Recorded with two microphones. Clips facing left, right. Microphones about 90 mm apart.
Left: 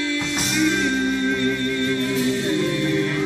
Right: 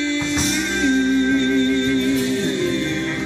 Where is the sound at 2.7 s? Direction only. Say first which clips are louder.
Even; 15° left (ahead or behind).